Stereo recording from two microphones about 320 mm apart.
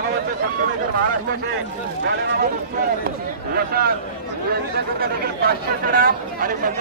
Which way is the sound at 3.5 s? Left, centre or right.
Right.